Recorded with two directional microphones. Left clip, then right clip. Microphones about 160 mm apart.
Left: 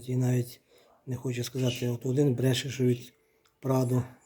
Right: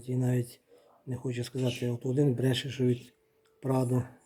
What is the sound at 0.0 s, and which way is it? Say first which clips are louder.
Speech: left 1 dB; 5° right (ahead or behind).